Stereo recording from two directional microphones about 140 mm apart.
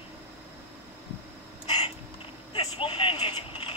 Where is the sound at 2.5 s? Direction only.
40° left (ahead or behind).